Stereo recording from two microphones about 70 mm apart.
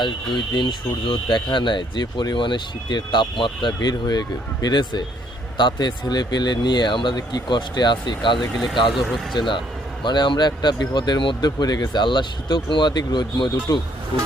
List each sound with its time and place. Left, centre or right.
0.0 s speech: left
8.5 s speech: centre
9.3 s speech: left